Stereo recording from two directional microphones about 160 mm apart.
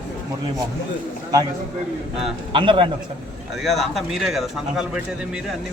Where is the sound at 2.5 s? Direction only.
30° right (ahead or behind).